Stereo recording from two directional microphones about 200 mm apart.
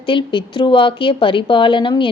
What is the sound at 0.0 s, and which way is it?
A woman's voice, 25° left (ahead or behind).